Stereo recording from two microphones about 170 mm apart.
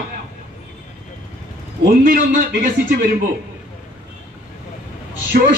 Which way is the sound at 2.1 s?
55° right (ahead or behind).